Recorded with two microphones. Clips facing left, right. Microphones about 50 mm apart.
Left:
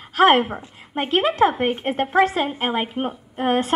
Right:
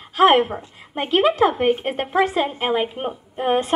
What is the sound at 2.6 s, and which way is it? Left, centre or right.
Speech, left.